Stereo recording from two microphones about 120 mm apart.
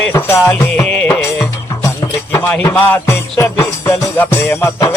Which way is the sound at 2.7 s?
15° left (ahead or behind).